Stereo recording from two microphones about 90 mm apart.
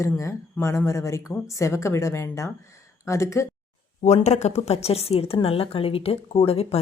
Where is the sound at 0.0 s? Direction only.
35° left (ahead or behind).